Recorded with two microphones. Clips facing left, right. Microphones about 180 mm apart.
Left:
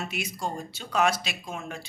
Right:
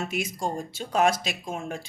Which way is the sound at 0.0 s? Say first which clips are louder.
Right 3 dB; 45° right (ahead or behind).